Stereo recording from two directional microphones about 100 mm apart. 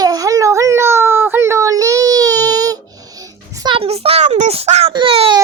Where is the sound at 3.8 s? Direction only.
80° right.